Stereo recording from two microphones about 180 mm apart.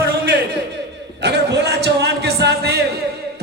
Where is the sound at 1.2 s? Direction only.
70° right (ahead or behind).